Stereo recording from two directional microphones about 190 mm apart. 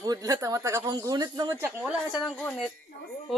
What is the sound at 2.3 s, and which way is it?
Speech, 10° left (ahead or behind).